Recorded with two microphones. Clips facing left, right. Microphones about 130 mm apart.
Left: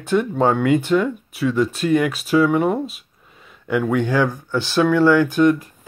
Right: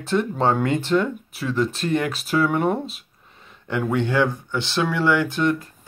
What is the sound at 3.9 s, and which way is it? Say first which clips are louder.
Speech: right 1 dB; 20° right (ahead or behind).